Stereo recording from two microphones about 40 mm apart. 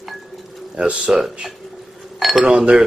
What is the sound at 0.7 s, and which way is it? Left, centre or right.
Speech, right.